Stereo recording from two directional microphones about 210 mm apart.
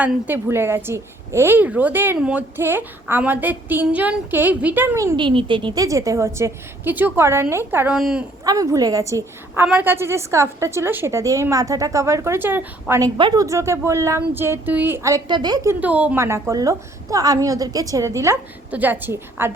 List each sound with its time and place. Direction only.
0.0 s a woman's voice: 10° right (ahead or behind)
8.4 s a woman's voice: 15° right (ahead or behind)